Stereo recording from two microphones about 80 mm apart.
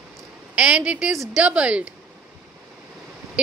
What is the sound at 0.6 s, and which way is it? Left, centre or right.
Speech, centre.